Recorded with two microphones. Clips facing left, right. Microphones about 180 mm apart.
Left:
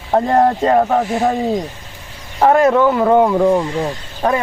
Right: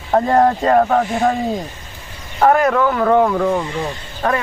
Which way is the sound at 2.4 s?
20° left (ahead or behind).